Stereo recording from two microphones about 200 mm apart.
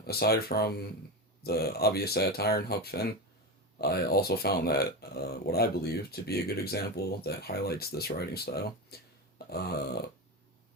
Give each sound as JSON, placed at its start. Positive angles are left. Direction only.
{"t": 0.0, "sound": "speech", "side_deg": 50}